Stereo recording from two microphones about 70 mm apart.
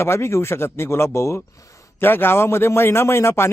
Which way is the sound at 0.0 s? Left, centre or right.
Left.